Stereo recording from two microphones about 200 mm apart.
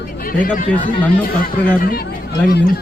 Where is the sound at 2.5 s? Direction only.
50° left (ahead or behind).